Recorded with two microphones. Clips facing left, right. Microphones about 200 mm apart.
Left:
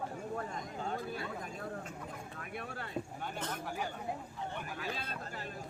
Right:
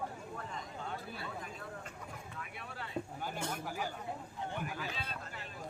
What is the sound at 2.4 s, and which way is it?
Vehicle, 45° left (ahead or behind).